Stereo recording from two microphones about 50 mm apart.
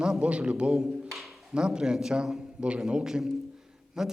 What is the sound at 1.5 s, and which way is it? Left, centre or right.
A man's voice, centre.